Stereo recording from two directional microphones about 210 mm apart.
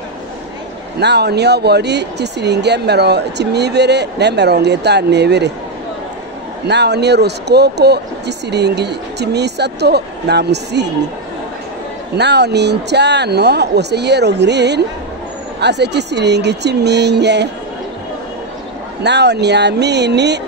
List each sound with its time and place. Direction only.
0.9 s speech: 50° right (ahead or behind)
6.7 s speech: 55° right (ahead or behind)
12.2 s speech: 55° right (ahead or behind)
19.0 s speech: 55° right (ahead or behind)